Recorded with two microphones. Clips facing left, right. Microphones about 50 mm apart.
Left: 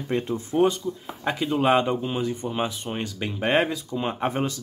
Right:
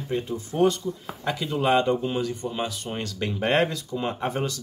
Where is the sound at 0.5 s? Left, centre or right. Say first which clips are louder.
Left 1 dB; centre.